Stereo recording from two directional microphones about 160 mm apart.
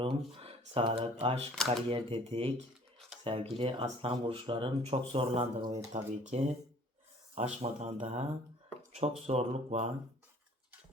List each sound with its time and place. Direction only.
0.0 s speech: 35° right (ahead or behind)
9.2 s speech: 40° right (ahead or behind)